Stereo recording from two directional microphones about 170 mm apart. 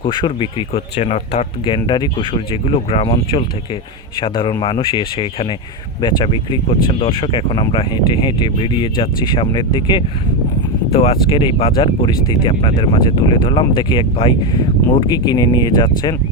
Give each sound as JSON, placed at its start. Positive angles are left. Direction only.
{"t": 0.0, "sound": "speech", "side_deg": 30}